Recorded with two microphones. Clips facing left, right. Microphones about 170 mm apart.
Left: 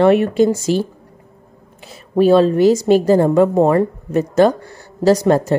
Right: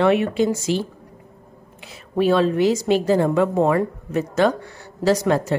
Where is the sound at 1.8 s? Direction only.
40° left (ahead or behind).